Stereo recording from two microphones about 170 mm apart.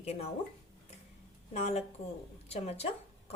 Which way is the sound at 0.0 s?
40° left (ahead or behind).